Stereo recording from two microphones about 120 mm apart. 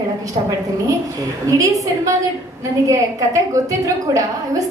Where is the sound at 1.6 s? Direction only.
30° right (ahead or behind).